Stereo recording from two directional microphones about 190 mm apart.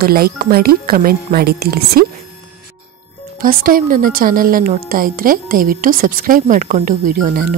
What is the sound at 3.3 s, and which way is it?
A woman's voice, 50° right (ahead or behind).